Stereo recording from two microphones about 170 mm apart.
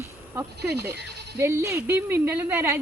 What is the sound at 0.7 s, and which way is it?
Speech, 75° right (ahead or behind).